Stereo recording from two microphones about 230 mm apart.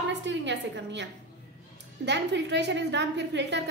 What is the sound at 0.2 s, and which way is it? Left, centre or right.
Speech, right.